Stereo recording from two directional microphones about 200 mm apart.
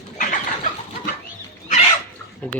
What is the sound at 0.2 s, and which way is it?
Bird, 40° left (ahead or behind).